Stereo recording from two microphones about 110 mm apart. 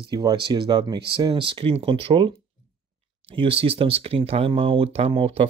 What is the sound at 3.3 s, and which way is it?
Speech, 60° right (ahead or behind).